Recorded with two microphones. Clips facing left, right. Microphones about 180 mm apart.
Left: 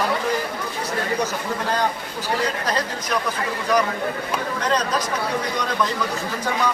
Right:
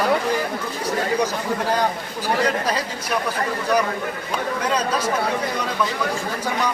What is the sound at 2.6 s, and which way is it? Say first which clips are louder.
Speech: even; 10° right (ahead or behind).